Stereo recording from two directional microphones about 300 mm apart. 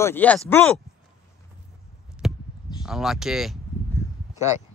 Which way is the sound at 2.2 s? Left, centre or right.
Centre.